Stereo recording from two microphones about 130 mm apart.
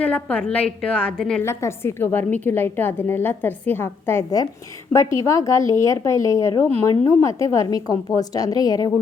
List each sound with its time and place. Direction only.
0.0 s a woman's voice: 10° left (ahead or behind)
1.4 s a woman's voice: 20° left (ahead or behind)